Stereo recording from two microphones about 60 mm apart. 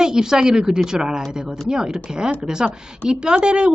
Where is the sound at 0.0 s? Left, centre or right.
Centre.